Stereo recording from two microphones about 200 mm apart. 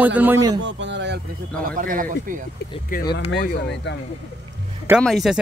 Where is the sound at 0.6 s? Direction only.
65° right (ahead or behind).